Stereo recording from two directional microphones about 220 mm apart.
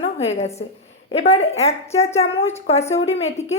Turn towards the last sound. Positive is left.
turn(degrees=30)  # may be behind; listen again after turning